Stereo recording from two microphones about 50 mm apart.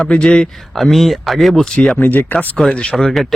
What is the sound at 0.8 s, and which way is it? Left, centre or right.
Speech, centre.